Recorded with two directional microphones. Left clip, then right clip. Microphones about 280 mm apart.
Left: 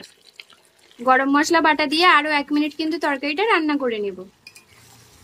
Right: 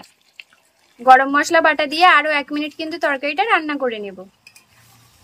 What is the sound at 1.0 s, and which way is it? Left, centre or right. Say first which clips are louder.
A woman's voice: right 5 dB; centre.